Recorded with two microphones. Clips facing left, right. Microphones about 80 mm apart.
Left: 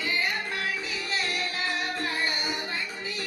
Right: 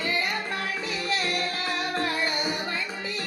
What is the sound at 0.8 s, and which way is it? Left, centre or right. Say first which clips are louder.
Music: right 3 dB; right.